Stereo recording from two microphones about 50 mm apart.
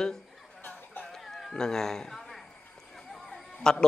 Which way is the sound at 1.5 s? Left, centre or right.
Centre.